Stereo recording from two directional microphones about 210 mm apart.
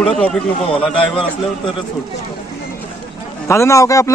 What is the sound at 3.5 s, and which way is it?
Speech, 15° left (ahead or behind).